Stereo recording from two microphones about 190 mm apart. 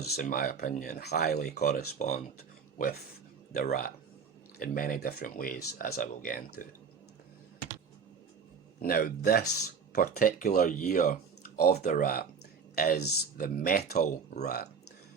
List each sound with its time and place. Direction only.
0.2 s speech: 45° left (ahead or behind)
8.8 s speech: 50° left (ahead or behind)
13.9 s speech: 40° left (ahead or behind)